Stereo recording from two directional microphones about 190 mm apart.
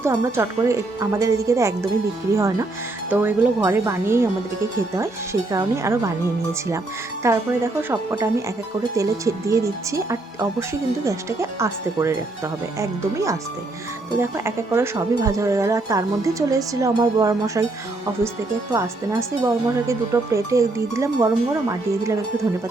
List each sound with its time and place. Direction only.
0.0 s speech: 15° right (ahead or behind)
7.2 s speech: 15° right (ahead or behind)
18.7 s speech: 15° right (ahead or behind)